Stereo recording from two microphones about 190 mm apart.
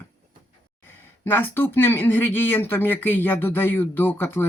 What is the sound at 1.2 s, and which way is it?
Speech, 10° left (ahead or behind).